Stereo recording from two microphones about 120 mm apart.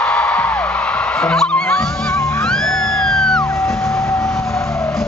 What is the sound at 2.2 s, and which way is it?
Music, 25° left (ahead or behind).